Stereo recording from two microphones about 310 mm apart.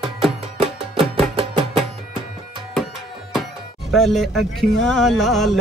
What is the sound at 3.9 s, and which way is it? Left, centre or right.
Speech, centre.